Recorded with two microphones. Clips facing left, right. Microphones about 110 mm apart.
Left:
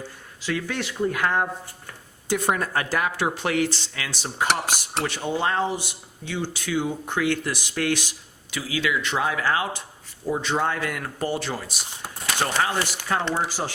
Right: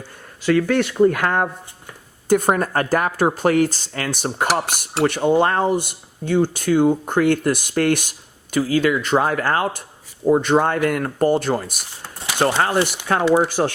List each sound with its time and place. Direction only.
0.4 s speech: 55° right (ahead or behind)
12.4 s speech: 60° right (ahead or behind)